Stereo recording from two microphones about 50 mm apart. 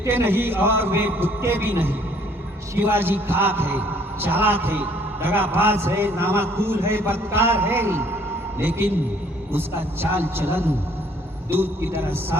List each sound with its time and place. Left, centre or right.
0.1 s a man's voice: right